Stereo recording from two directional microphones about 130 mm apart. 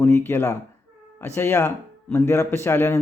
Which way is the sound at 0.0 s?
20° left (ahead or behind).